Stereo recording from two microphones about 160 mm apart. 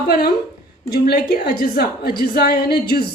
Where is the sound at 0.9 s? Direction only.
75° left (ahead or behind).